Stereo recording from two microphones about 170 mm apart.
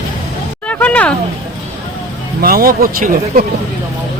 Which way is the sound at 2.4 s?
60° right (ahead or behind).